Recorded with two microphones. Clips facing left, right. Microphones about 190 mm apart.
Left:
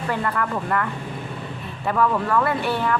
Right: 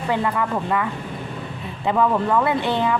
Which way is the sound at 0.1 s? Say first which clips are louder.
Right 3 dB; 15° right (ahead or behind).